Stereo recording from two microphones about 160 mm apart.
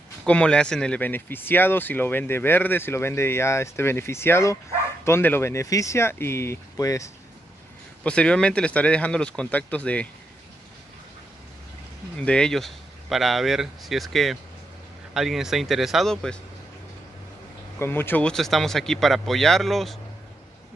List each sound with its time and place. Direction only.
0.2 s speech: 5° left (ahead or behind)
8.0 s speech: 5° left (ahead or behind)
12.2 s speech: 5° left (ahead or behind)
17.7 s speech: 15° left (ahead or behind)